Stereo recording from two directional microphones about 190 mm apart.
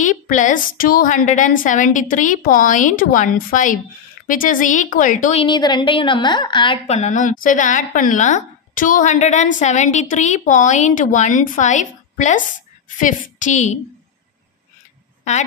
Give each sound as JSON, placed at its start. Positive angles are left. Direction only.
{"t": 0.0, "sound": "a woman's voice", "side_deg": 40}
{"t": 5.4, "sound": "a woman's voice", "side_deg": 25}